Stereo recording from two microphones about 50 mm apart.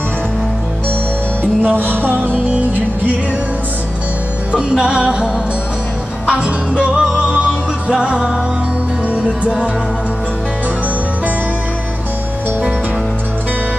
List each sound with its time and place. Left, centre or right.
1.6 s music: right
4.5 s music: centre
6.3 s music: right